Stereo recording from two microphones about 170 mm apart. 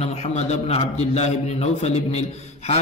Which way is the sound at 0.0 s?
35° left (ahead or behind).